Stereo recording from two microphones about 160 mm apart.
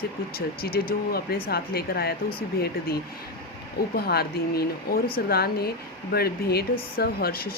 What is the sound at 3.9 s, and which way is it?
Speech, 75° left (ahead or behind).